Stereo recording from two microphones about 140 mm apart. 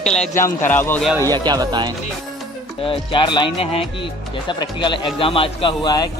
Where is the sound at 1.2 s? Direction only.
30° right (ahead or behind).